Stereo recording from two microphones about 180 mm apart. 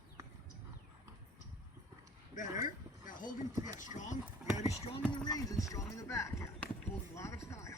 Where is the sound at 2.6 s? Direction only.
45° left (ahead or behind).